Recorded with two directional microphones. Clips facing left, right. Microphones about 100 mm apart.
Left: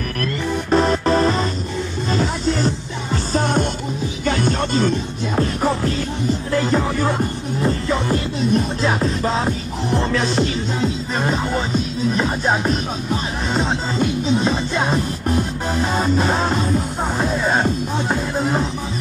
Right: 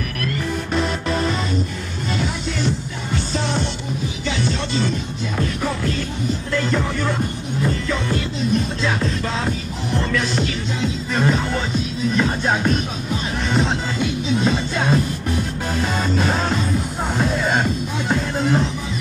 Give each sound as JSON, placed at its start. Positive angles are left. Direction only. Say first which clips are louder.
{"t": 0.7, "sound": "music", "louder": "left 8 dB", "side_deg": 40}
{"t": 3.3, "sound": "music", "louder": "left 6 dB", "side_deg": 45}
{"t": 12.2, "sound": "speech", "louder": "right 1 dB", "side_deg": 25}
{"t": 14.4, "sound": "music", "louder": "left 1 dB", "side_deg": 30}
{"t": 16.0, "sound": "music", "louder": "left 3 dB", "side_deg": 20}